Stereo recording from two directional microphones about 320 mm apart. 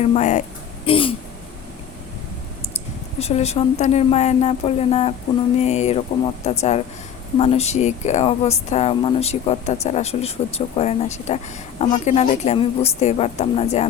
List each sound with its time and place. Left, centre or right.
0.0 s speech: left
0.9 s a sound: centre
3.2 s speech: centre